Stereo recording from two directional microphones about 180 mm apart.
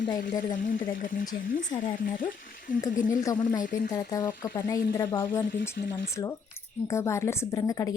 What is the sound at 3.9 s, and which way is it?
Speech, 15° left (ahead or behind).